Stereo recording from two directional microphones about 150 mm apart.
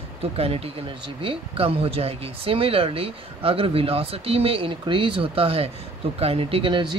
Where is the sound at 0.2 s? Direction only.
40° right (ahead or behind).